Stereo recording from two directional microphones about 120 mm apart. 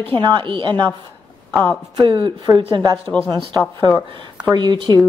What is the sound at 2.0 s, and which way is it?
Speech, 40° right (ahead or behind).